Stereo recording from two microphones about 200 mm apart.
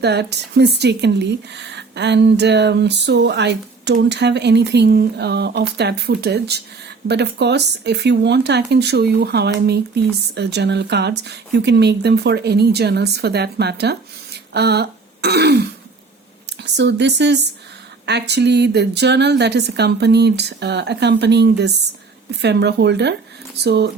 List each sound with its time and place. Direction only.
0.0 s speech: 55° right (ahead or behind)